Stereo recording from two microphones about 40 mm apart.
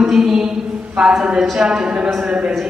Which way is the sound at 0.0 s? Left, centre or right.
Centre.